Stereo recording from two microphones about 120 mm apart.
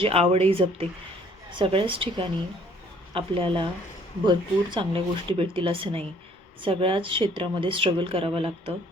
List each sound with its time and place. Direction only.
0.0 s speech: 55° right (ahead or behind)
1.5 s speech: 45° right (ahead or behind)